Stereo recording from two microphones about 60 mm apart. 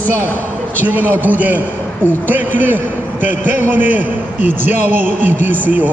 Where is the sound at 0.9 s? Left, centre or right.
Right.